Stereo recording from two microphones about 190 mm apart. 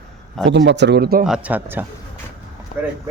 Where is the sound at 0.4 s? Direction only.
70° right (ahead or behind).